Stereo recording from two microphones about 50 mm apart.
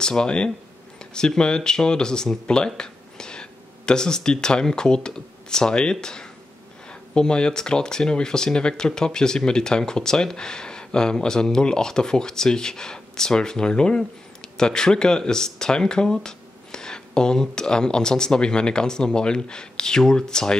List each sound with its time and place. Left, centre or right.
0.0 s speech: centre